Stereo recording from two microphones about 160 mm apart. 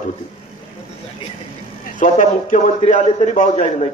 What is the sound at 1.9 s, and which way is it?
A man's voice, 50° left (ahead or behind).